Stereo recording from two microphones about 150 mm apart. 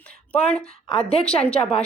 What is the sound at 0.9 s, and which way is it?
Speech, 40° left (ahead or behind).